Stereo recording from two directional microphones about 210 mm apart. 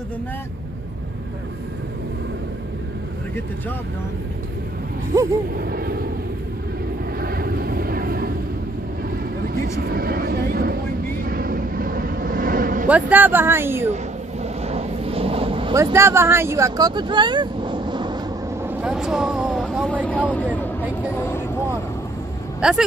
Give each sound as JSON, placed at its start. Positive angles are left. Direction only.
{"t": 5.1, "sound": "speech", "side_deg": -15}
{"t": 5.6, "sound": "speech", "side_deg": -45}
{"t": 7.2, "sound": "vehicle", "side_deg": -45}
{"t": 9.8, "sound": "vehicle", "side_deg": -45}
{"t": 12.8, "sound": "speech", "side_deg": -5}
{"t": 14.4, "sound": "vehicle", "side_deg": -30}
{"t": 15.7, "sound": "speech", "side_deg": -15}
{"t": 18.6, "sound": "speech", "side_deg": -5}
{"t": 20.1, "sound": "speech", "side_deg": 5}
{"t": 22.6, "sound": "speech", "side_deg": 0}